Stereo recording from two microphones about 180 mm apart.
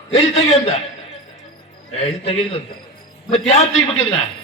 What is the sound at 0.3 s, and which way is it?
Speech, 35° left (ahead or behind).